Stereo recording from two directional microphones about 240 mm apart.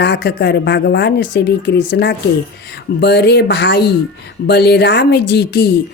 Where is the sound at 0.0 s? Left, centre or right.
Left.